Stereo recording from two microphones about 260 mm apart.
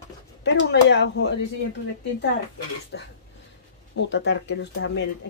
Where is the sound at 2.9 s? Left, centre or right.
Left.